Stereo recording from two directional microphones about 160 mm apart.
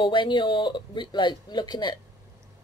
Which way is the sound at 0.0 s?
30° left (ahead or behind).